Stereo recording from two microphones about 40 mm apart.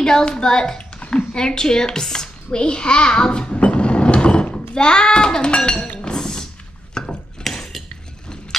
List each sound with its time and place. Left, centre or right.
0.0 s a child's voice: centre
5.9 s chink: centre
6.9 s mechanisms: centre
7.4 s cutlery: centre